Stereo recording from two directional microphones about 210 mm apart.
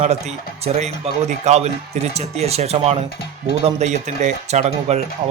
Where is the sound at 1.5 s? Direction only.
30° right (ahead or behind).